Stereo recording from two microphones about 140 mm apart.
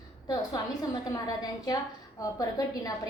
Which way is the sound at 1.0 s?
25° left (ahead or behind).